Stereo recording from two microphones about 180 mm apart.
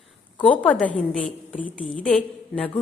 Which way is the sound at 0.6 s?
5° left (ahead or behind).